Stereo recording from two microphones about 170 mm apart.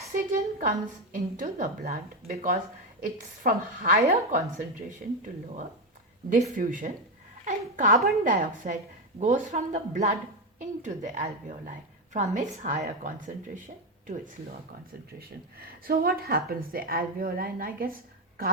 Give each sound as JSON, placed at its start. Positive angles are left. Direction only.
{"t": 0.1, "sound": "a woman's voice", "side_deg": -55}
{"t": 6.3, "sound": "speech", "side_deg": -50}
{"t": 9.1, "sound": "a woman's voice", "side_deg": -40}
{"t": 15.2, "sound": "speech", "side_deg": -60}